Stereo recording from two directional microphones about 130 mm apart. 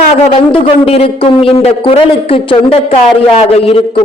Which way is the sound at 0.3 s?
45° left (ahead or behind).